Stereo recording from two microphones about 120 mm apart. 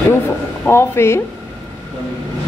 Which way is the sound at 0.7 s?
20° left (ahead or behind).